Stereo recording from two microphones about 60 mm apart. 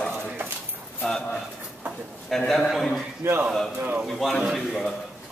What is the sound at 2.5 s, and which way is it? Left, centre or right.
Speech, centre.